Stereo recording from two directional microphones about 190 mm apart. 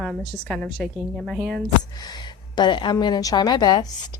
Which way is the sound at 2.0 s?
20° left (ahead or behind).